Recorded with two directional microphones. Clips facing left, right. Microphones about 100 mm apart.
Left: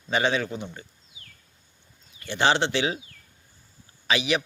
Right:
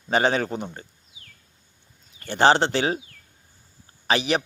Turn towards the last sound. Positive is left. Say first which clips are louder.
# right 2 dB
turn(degrees=-40)  # may be behind; listen again after turning